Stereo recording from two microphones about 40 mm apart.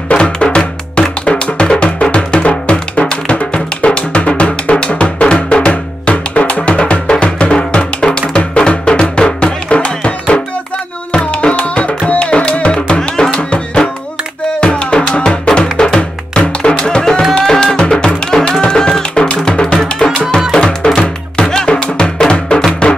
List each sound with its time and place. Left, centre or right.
0.1 s music: left
11.1 s tabla: left
12.1 s music: left